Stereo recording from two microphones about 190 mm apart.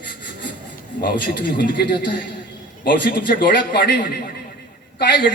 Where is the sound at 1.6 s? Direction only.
60° left (ahead or behind).